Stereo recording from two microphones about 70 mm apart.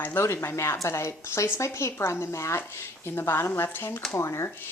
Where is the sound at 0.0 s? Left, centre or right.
Left.